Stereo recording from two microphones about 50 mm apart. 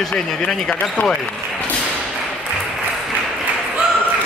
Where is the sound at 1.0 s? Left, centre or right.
Left.